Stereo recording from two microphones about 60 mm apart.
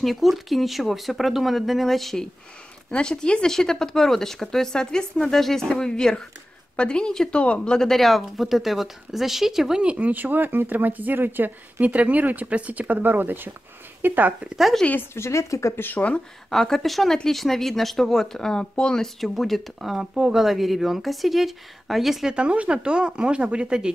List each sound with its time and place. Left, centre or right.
0.0 s speech: centre
2.9 s speech: centre
9.8 s speech: right
14.8 s speech: centre
15.1 s a woman's voice: left
15.8 s speech: left
16.4 s speech: centre
19.1 s speech: centre
22.3 s speech: centre